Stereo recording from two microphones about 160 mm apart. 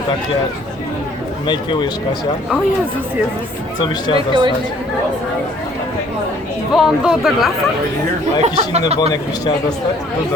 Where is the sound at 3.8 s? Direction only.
30° left (ahead or behind).